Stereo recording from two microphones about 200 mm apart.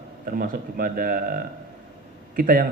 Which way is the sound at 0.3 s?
45° right (ahead or behind).